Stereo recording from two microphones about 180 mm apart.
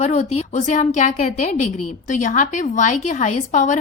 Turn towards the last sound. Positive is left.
turn(degrees=40)  # may be behind; listen again after turning